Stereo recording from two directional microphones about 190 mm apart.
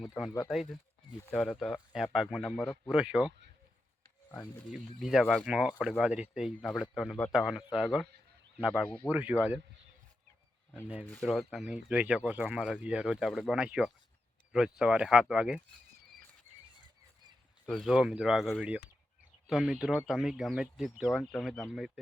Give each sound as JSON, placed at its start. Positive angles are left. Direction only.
{"t": 0.3, "sound": "speech", "side_deg": 15}
{"t": 0.5, "sound": "speech", "side_deg": 0}
{"t": 4.9, "sound": "speech", "side_deg": 0}
{"t": 11.0, "sound": "speech", "side_deg": 5}
{"t": 17.7, "sound": "speech", "side_deg": 0}